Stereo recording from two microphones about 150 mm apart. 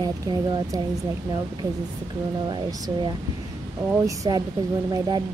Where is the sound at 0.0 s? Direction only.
25° right (ahead or behind).